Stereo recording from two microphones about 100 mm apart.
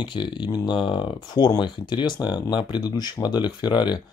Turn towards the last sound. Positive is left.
turn(degrees=50)  # may be behind; listen again after turning